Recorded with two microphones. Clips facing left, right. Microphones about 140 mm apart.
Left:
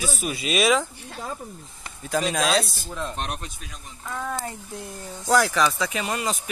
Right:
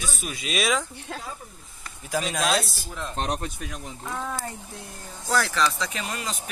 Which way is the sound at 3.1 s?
35° right (ahead or behind).